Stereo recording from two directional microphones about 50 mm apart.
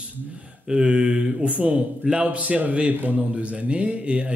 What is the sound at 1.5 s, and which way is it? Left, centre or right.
Speech, right.